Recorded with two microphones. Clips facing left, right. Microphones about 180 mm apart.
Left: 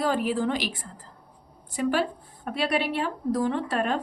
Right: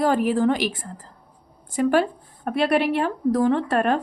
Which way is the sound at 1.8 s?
50° right (ahead or behind).